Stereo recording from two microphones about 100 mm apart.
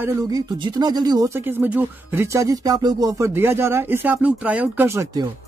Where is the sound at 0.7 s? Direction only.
45° right (ahead or behind).